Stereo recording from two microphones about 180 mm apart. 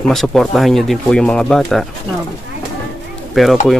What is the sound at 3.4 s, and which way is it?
Speech, centre (ahead or behind).